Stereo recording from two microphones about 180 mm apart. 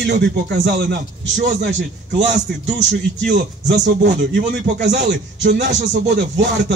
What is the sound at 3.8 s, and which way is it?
Speech, 75° right (ahead or behind).